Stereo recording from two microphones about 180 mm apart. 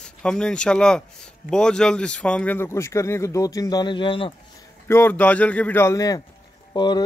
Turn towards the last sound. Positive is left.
turn(degrees=25)  # may be behind; listen again after turning